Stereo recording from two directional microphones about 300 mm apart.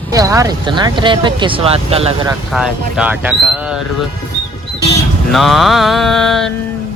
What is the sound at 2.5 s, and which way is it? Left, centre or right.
Speech, centre.